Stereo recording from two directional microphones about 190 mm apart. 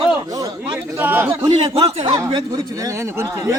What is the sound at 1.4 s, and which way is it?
Speech, 25° right (ahead or behind).